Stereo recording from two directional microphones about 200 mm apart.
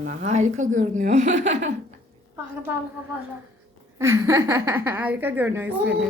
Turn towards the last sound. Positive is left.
turn(degrees=-10)  # may be behind; listen again after turning